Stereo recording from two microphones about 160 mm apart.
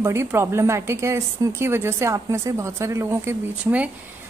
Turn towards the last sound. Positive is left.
turn(degrees=-10)  # may be behind; listen again after turning